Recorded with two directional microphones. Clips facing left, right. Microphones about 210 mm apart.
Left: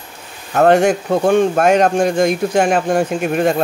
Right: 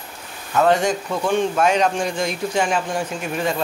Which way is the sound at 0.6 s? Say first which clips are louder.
Left 6 dB; 60° left (ahead or behind).